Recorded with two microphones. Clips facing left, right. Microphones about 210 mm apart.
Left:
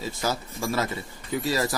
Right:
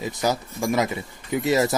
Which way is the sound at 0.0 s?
20° right (ahead or behind).